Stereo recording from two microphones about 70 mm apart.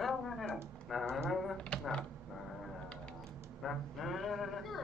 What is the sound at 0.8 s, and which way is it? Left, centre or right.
Typing, centre.